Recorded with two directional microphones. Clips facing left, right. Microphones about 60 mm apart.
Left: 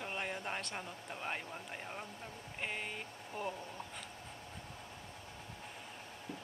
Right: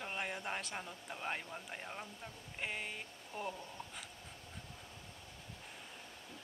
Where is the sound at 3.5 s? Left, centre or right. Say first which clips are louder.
Left 2 dB; left.